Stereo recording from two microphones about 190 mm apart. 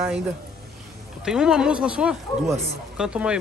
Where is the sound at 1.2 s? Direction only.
5° right (ahead or behind).